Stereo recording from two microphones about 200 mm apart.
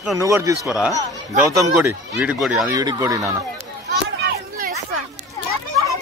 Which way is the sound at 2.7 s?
20° right (ahead or behind).